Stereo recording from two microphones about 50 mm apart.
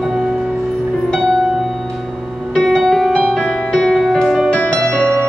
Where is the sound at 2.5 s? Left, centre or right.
Centre.